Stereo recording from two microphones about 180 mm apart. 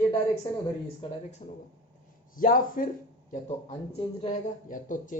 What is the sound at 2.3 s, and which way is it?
Speech, 50° left (ahead or behind).